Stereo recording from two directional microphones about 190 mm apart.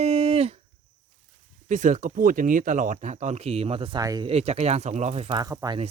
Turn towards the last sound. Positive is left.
turn(degrees=-20)  # may be behind; listen again after turning